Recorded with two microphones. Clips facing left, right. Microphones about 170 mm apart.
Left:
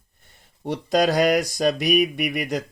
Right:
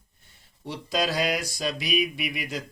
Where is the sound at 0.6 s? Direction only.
55° left (ahead or behind).